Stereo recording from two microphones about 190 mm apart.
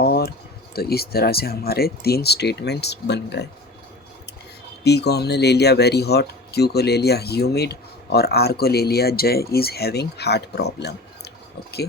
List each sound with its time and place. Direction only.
0.0 s speech: 55° left (ahead or behind)
4.8 s speech: 60° left (ahead or behind)